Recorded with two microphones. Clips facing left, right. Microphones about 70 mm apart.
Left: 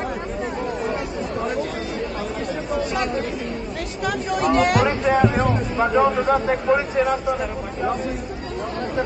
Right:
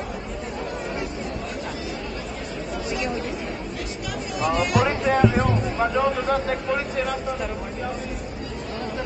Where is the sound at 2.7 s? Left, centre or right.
Left.